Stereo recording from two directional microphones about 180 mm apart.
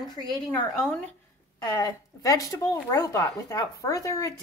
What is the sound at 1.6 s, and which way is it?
Speech, 20° left (ahead or behind).